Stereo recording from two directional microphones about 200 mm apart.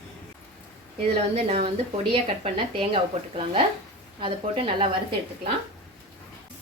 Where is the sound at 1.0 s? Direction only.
30° right (ahead or behind).